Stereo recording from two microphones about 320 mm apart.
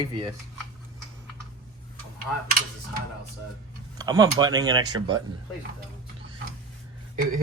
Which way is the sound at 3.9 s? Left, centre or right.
Centre.